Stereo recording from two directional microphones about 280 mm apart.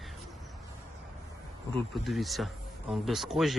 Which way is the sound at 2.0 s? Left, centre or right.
Centre.